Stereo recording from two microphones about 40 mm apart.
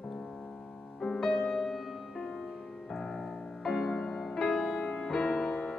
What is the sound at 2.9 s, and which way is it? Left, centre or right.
Music, centre.